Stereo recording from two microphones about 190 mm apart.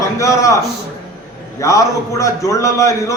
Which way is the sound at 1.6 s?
15° left (ahead or behind).